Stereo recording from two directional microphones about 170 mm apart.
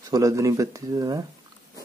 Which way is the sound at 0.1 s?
20° right (ahead or behind).